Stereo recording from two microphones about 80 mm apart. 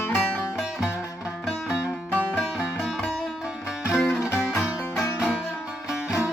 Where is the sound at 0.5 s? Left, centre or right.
Centre.